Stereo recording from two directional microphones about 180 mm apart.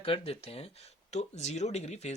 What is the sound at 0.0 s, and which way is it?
Speech, 35° left (ahead or behind).